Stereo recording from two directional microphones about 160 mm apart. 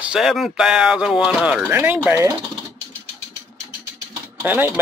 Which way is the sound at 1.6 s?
15° right (ahead or behind).